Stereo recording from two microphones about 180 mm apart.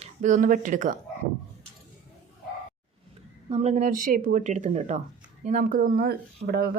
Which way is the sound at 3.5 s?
35° right (ahead or behind).